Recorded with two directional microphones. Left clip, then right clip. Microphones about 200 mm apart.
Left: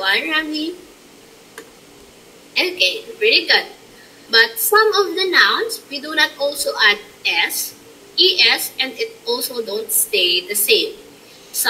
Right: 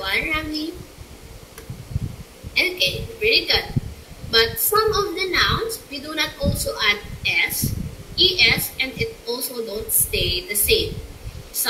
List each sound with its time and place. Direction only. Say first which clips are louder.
0.0 s a woman's voice: left 5 dB; 20° left (ahead or behind)
2.5 s a woman's voice: left 3 dB; 20° left (ahead or behind)